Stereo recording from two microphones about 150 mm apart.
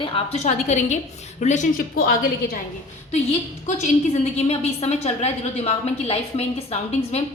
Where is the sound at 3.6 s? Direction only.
55° left (ahead or behind).